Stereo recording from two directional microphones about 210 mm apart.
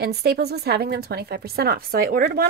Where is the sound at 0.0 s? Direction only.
50° right (ahead or behind).